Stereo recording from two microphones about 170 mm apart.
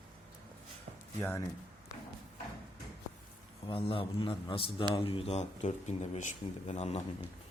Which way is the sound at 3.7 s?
30° left (ahead or behind).